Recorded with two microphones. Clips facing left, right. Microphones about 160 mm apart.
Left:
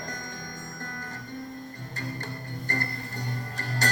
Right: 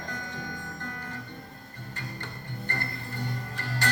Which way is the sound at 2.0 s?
40° left (ahead or behind).